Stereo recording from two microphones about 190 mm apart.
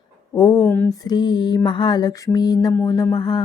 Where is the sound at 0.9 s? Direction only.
20° left (ahead or behind).